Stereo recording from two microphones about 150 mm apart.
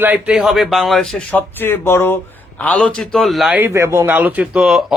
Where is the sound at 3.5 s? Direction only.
15° right (ahead or behind).